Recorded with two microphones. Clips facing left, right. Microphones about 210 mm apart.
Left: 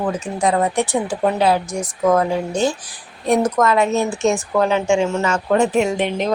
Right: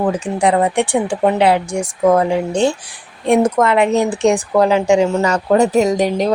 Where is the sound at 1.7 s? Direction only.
80° right.